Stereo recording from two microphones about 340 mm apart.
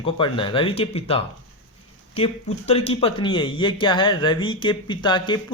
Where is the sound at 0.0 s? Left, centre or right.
Centre.